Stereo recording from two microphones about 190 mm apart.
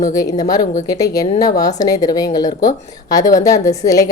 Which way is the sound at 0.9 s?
20° left (ahead or behind).